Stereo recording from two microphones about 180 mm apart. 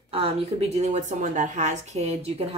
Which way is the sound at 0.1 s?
35° right (ahead or behind).